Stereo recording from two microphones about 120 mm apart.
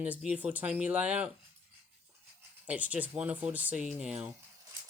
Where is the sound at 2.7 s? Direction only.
10° right (ahead or behind).